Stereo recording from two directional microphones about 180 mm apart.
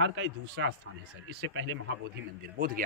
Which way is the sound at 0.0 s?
90° right.